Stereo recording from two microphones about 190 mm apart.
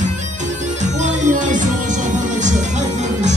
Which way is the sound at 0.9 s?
40° right (ahead or behind).